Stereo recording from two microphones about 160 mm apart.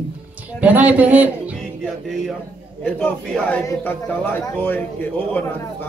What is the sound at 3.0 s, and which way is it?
Speech, 5° left (ahead or behind).